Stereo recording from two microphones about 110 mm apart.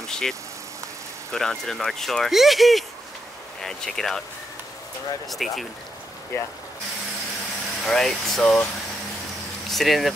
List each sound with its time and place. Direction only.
0.0 s vehicle: 5° left (ahead or behind)
1.3 s speech: 5° left (ahead or behind)
5.3 s speech: centre (ahead or behind)
6.3 s speech: 25° left (ahead or behind)
7.8 s speech: centre (ahead or behind)
9.7 s speech: centre (ahead or behind)